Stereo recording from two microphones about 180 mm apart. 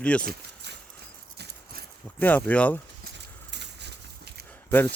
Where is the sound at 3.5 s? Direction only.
70° right (ahead or behind).